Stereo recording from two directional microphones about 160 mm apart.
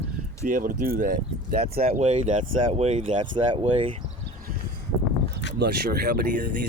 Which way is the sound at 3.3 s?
30° right (ahead or behind).